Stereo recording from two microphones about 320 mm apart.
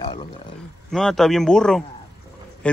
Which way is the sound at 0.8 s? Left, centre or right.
Centre.